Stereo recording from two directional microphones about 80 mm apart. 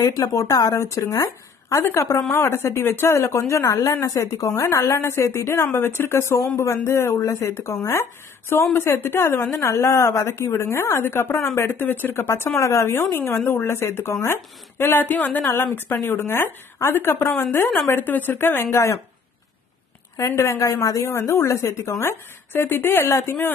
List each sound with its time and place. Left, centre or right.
0.0 s speech: left
15.5 s speech: left
20.2 s speech: left